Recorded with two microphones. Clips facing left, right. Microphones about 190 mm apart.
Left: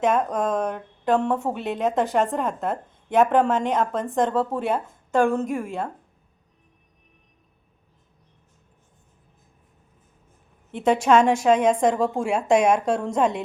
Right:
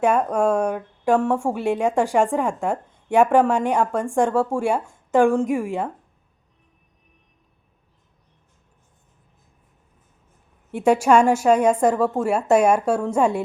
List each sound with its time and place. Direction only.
0.0 s speech: 10° right (ahead or behind)
10.7 s speech: 10° right (ahead or behind)